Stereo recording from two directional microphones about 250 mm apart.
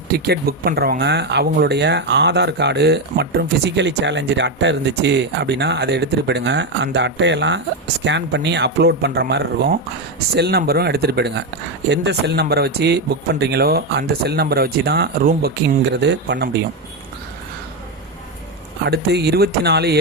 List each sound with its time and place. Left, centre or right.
0.1 s speech: right
18.9 s speech: right